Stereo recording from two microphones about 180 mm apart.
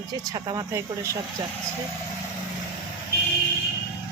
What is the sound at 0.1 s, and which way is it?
Speech, 20° right (ahead or behind).